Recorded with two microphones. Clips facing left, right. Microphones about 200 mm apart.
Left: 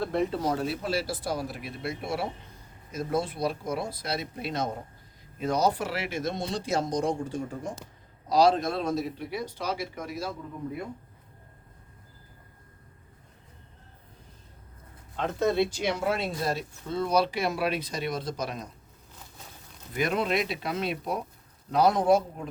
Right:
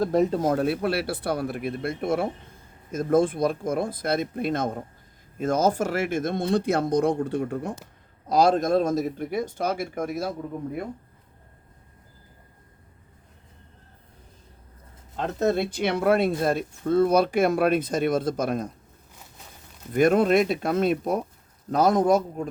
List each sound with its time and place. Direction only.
0.0 s speech: 40° right (ahead or behind); by 7.8 s 60° right (ahead or behind)
8.3 s speech: 50° right (ahead or behind)
15.1 s speech: 40° right (ahead or behind)
19.9 s speech: 50° right (ahead or behind)